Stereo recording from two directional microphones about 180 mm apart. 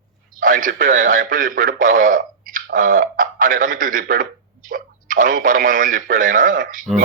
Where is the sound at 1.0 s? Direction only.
50° right (ahead or behind).